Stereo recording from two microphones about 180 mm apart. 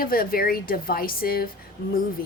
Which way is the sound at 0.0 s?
55° left (ahead or behind).